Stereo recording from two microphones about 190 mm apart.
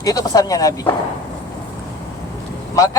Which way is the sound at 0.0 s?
20° left (ahead or behind).